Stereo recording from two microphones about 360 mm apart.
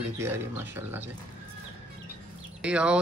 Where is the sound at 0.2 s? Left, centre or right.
Centre.